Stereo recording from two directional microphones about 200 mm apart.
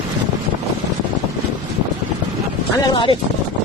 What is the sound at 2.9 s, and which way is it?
Speech, 20° left (ahead or behind).